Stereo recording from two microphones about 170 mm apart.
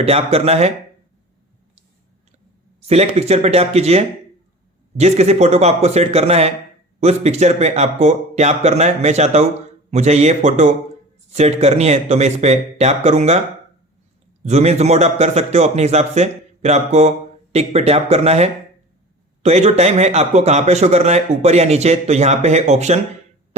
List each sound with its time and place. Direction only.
0.0 s a man's voice: 35° right (ahead or behind)
2.8 s a man's voice: 40° right (ahead or behind)
14.4 s a man's voice: 40° right (ahead or behind)